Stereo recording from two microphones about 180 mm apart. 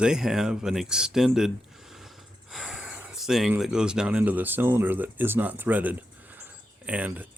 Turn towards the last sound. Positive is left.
turn(degrees=-10)  # may be behind; listen again after turning